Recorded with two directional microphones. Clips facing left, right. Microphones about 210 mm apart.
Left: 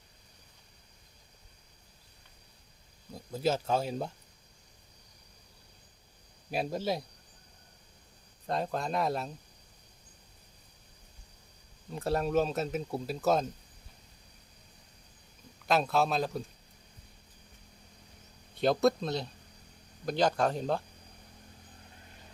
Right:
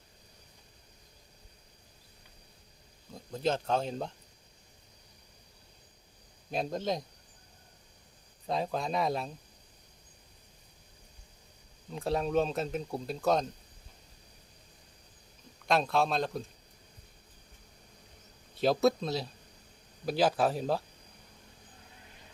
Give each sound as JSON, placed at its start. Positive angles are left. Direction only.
{"t": 3.2, "sound": "speech", "side_deg": 5}
{"t": 6.5, "sound": "speech", "side_deg": 5}
{"t": 8.4, "sound": "speech", "side_deg": 0}
{"t": 11.9, "sound": "speech", "side_deg": 0}
{"t": 15.6, "sound": "speech", "side_deg": 0}
{"t": 18.5, "sound": "speech", "side_deg": 0}